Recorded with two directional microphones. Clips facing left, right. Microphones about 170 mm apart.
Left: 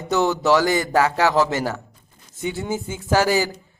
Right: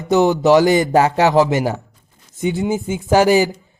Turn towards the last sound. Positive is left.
turn(degrees=-20)  # may be behind; listen again after turning